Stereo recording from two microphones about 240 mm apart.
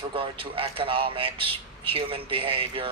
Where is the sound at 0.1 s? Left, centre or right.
Right.